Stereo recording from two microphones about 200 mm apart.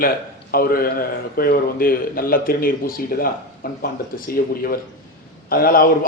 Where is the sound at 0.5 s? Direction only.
45° left (ahead or behind).